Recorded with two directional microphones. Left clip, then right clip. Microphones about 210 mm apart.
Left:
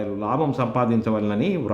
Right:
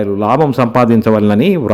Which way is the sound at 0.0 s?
40° right (ahead or behind).